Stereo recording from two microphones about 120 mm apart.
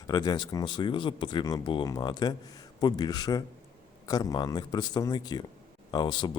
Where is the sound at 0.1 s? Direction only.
35° left (ahead or behind).